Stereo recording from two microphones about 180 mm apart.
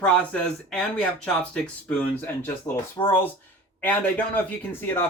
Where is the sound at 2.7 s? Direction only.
20° left (ahead or behind).